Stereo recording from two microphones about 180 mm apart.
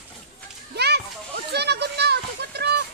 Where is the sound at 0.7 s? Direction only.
65° right (ahead or behind).